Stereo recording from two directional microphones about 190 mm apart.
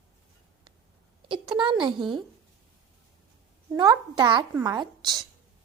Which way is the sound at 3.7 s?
25° right (ahead or behind).